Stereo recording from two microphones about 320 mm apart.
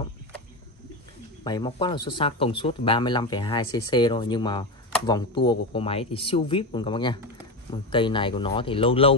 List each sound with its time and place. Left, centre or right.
1.4 s speech: centre